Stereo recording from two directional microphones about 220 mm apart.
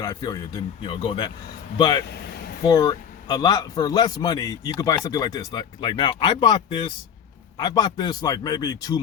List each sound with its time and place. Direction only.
0.0 s speech: 15° left (ahead or behind)
2.0 s speech: 45° left (ahead or behind)
2.6 s a man's voice: 15° left (ahead or behind)